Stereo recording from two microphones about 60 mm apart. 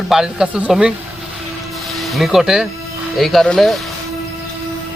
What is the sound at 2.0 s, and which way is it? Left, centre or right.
Speech, centre.